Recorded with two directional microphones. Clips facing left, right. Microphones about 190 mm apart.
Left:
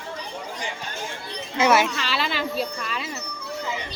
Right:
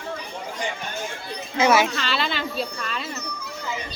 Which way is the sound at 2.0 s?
5° left (ahead or behind).